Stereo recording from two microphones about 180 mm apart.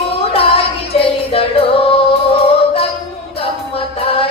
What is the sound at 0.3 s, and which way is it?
Music, 30° left (ahead or behind).